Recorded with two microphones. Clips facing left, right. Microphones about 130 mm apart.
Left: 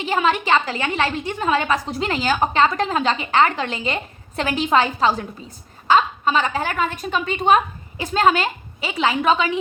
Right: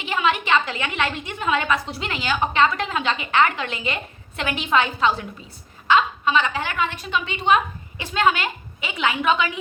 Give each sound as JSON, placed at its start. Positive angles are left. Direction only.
{"t": 0.0, "sound": "a woman's voice", "side_deg": 40}